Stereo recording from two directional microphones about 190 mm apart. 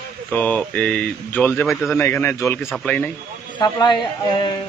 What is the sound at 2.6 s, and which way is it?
Speech, centre (ahead or behind).